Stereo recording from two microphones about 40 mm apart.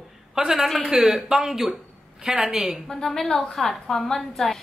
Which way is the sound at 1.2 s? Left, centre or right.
Centre.